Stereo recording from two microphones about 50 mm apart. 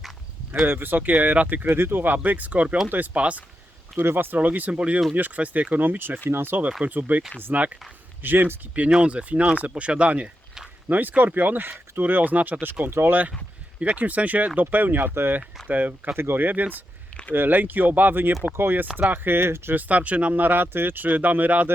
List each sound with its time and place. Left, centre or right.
0.7 s speech: right
1.6 s speech: right
3.2 s speech: right
3.9 s speech: right
4.4 s speech: right
4.7 s speech: centre
5.1 s speech: right
6.8 s speech: right
8.9 s speech: right
15.6 s speech: right
16.1 s speech: right
16.4 s speech: right
19.7 s speech: right